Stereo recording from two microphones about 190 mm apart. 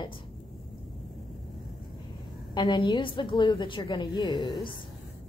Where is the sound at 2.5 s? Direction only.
20° left (ahead or behind).